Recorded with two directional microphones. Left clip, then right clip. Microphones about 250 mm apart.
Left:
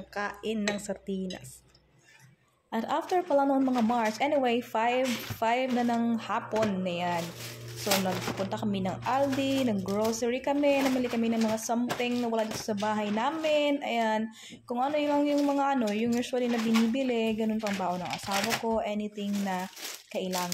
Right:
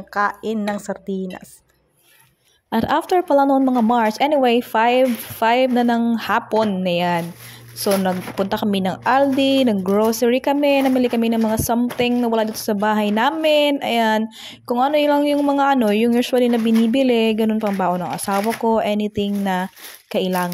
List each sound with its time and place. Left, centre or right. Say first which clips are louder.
0.1 s speech: right 13 dB; centre
2.7 s speech: right 11 dB; right
8.5 s speech: right 11 dB; right